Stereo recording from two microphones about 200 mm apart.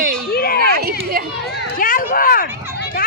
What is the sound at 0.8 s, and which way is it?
Speech, 50° right (ahead or behind).